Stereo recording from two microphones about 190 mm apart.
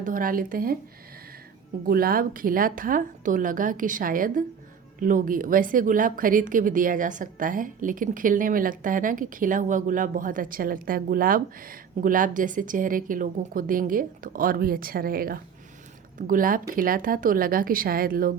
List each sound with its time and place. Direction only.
0.0 s a woman's voice: 45° right (ahead or behind)
1.9 s a woman's voice: 50° right (ahead or behind)